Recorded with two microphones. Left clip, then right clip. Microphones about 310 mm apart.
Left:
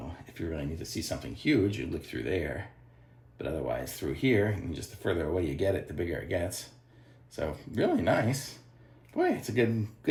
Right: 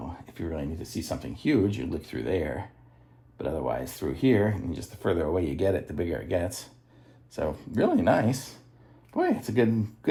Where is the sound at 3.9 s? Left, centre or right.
Centre.